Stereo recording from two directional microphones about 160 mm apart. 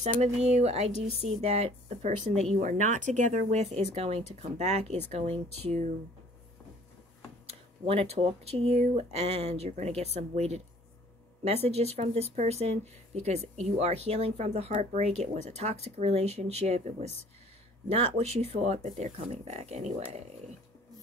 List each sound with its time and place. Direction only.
0.0 s speech: 45° right (ahead or behind)
7.8 s speech: 40° right (ahead or behind)